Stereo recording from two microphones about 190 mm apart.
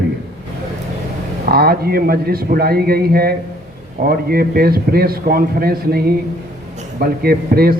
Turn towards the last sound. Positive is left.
turn(degrees=-55)  # may be behind; listen again after turning